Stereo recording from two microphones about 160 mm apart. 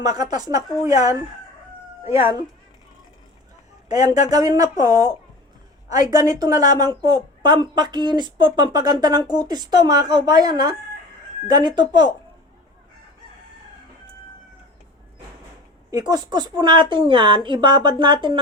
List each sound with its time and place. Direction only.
0.0 s a woman's voice: 25° right (ahead or behind)
3.8 s speech: 50° left (ahead or behind)
4.3 s a woman's voice: 25° right (ahead or behind)
15.9 s a woman's voice: 25° right (ahead or behind)